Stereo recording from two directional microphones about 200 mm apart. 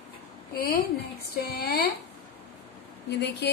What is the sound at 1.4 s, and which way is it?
Speech, 50° left (ahead or behind).